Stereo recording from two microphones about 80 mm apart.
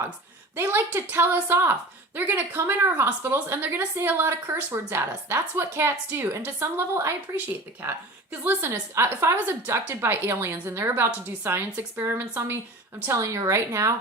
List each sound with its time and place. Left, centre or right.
0.5 s a woman's voice: right